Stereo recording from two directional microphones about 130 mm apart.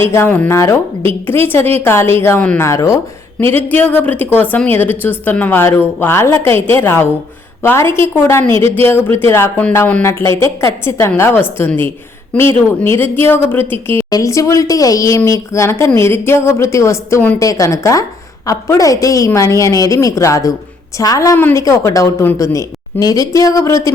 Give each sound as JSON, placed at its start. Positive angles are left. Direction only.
{"t": 0.0, "sound": "a woman's voice", "side_deg": 20}
{"t": 21.3, "sound": "a woman's voice", "side_deg": 15}